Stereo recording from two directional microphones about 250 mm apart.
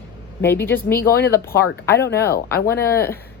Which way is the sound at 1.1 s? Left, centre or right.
Left.